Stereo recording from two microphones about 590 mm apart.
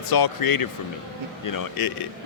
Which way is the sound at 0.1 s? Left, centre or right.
Left.